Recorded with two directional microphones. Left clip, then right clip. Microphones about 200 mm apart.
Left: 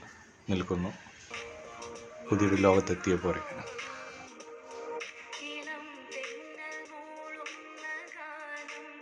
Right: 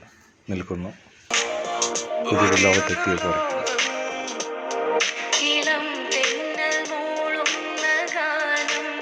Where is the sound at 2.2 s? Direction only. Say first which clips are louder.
Right 9 dB; 45° right (ahead or behind).